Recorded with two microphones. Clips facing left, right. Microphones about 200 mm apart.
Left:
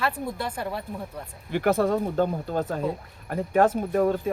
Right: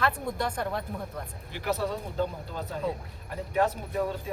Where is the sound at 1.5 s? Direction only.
55° left (ahead or behind).